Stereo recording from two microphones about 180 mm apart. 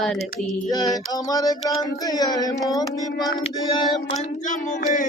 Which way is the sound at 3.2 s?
Centre (ahead or behind).